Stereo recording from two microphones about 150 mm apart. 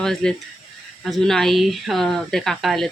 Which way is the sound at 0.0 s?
5° left (ahead or behind).